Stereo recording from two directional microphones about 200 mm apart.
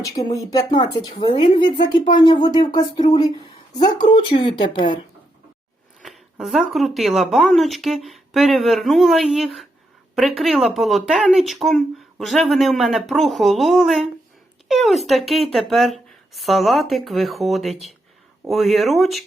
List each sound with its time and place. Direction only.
0.0 s speech: 15° left (ahead or behind)
6.0 s speech: centre (ahead or behind)